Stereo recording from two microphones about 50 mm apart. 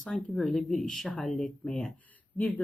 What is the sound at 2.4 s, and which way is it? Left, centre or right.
Speech, left.